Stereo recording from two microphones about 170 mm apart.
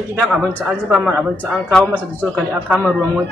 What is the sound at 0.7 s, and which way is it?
Speech, 5° right (ahead or behind).